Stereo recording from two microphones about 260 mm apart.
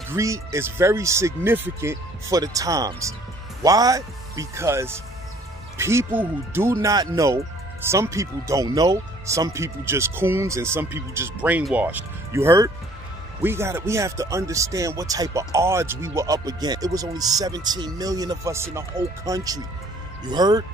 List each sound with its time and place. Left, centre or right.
0.1 s speech: centre